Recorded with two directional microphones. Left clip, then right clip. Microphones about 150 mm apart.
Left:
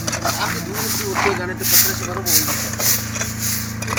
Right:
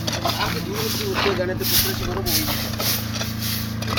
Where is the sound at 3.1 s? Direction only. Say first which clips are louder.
Left 3 dB; 20° left (ahead or behind).